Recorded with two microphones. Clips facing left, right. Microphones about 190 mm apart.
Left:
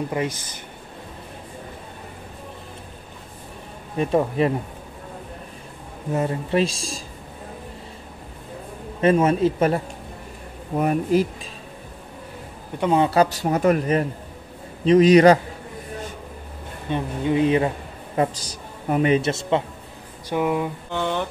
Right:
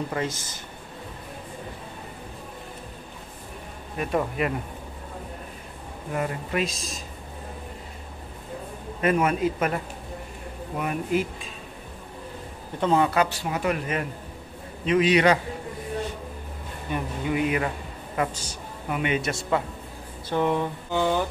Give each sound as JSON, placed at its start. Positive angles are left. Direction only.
{"t": 0.1, "sound": "speech", "side_deg": 15}
{"t": 3.9, "sound": "speech", "side_deg": 25}
{"t": 6.1, "sound": "speech", "side_deg": 30}
{"t": 9.0, "sound": "speech", "side_deg": 30}
{"t": 10.8, "sound": "speech", "side_deg": 40}
{"t": 12.8, "sound": "speech", "side_deg": 20}
{"t": 13.1, "sound": "speech", "side_deg": 40}
{"t": 16.9, "sound": "a man's voice", "side_deg": 25}
{"t": 20.2, "sound": "speech", "side_deg": 10}
{"t": 20.9, "sound": "speech", "side_deg": -5}